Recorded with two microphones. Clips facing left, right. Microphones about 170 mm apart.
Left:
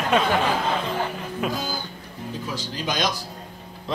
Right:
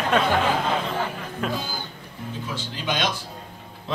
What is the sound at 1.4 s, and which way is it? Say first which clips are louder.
Speech: even; 10° left (ahead or behind).